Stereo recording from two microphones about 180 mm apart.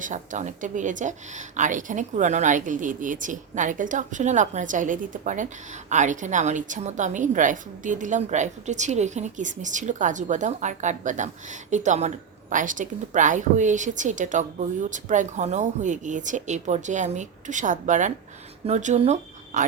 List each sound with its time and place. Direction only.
0.0 s a woman's voice: 45° right (ahead or behind)